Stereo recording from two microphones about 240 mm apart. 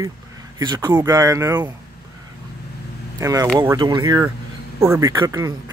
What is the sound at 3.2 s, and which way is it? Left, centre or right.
Speech, centre.